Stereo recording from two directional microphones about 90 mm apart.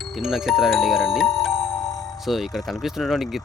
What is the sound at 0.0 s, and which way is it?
Speech, 5° right (ahead or behind).